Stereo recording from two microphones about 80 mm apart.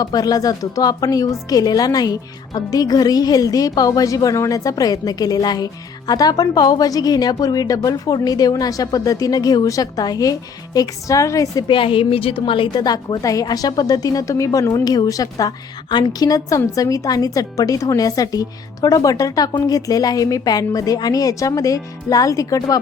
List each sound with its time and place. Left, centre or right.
0.0 s speech: left
11.7 s a woman's voice: left
12.8 s speech: left